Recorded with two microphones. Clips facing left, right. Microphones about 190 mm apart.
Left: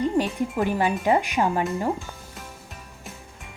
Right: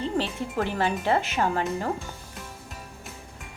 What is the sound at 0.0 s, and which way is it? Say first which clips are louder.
Speech: left 5 dB; 15° left (ahead or behind).